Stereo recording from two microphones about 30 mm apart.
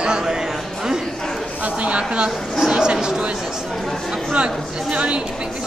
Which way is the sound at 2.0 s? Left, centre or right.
Right.